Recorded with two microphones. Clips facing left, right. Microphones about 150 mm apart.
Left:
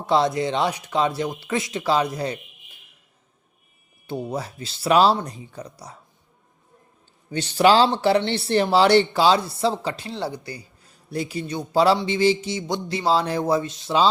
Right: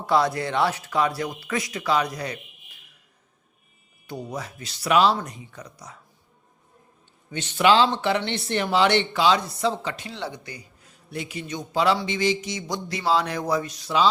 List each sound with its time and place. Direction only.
0.0 s speech: 25° left (ahead or behind)
4.0 s speech: 25° left (ahead or behind)
7.3 s speech: 35° left (ahead or behind)